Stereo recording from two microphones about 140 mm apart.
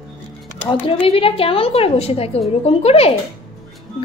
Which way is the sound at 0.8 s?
40° left (ahead or behind).